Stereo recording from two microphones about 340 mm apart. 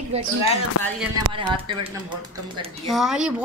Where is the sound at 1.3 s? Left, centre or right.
Centre.